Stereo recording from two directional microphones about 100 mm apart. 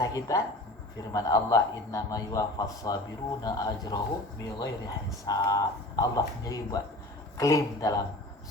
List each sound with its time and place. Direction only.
0.0 s a man's voice: 35° left (ahead or behind)